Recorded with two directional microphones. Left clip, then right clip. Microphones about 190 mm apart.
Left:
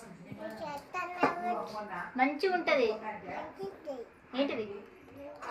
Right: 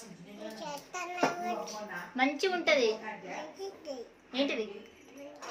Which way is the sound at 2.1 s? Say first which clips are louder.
Left 1 dB; centre (ahead or behind).